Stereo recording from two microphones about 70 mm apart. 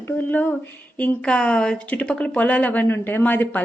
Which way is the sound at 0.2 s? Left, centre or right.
Left.